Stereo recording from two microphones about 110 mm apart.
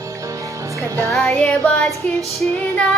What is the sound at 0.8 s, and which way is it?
Music, 30° right (ahead or behind).